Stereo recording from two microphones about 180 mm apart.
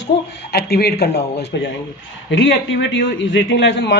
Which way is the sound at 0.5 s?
60° left (ahead or behind).